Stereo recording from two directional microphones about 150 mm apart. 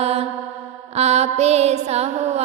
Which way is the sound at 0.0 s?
45° right (ahead or behind).